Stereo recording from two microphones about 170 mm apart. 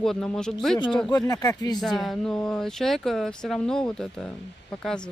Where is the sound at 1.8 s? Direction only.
Centre (ahead or behind).